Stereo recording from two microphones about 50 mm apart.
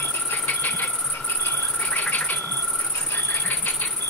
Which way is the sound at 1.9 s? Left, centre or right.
Left.